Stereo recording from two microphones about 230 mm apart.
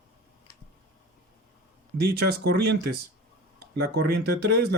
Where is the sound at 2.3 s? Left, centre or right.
Right.